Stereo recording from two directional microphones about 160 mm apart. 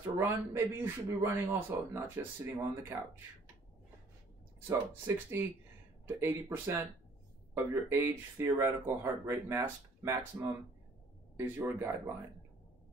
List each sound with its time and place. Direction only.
0.0 s speech: 15° right (ahead or behind)
4.6 s speech: 15° right (ahead or behind)